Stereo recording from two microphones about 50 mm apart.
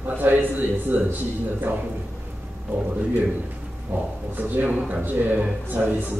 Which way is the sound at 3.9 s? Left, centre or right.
Right.